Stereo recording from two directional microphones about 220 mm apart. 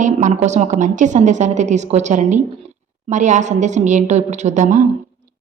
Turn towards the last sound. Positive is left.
turn(degrees=-35)  # may be behind; listen again after turning